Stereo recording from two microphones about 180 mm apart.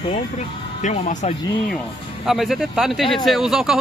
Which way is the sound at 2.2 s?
Centre (ahead or behind).